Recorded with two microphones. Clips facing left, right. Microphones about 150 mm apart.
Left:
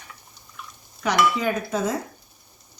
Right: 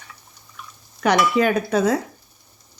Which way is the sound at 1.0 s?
70° right (ahead or behind).